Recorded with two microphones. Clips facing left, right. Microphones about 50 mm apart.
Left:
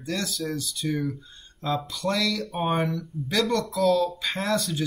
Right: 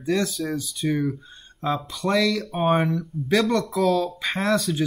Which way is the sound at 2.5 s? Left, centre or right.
Centre.